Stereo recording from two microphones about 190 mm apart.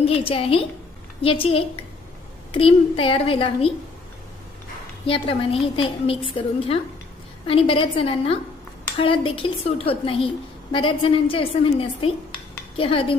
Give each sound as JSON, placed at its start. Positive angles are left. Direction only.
{"t": 0.0, "sound": "a woman's voice", "side_deg": 30}
{"t": 5.0, "sound": "a woman's voice", "side_deg": 30}